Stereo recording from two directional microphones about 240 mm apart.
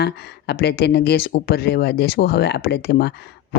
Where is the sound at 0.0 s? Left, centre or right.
Left.